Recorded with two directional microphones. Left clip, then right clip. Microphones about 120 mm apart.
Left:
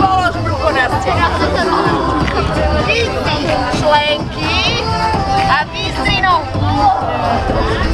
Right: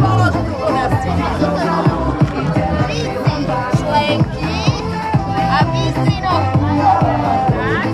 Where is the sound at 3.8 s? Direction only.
5° right (ahead or behind).